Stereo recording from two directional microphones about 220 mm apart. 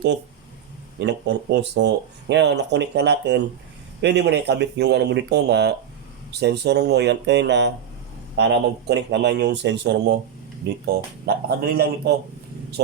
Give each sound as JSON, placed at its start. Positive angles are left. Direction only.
{"t": 0.9, "sound": "speech", "side_deg": -50}
{"t": 11.4, "sound": "speech", "side_deg": -45}